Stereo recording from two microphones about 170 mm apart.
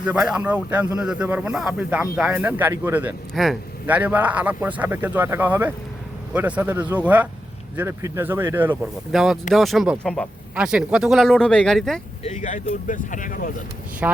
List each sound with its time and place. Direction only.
0.0 s speech: 5° right (ahead or behind)
3.3 s speech: centre (ahead or behind)
8.8 s speech: centre (ahead or behind)
10.5 s speech: 5° right (ahead or behind)
12.2 s speech: 45° left (ahead or behind)
14.0 s speech: 10° right (ahead or behind)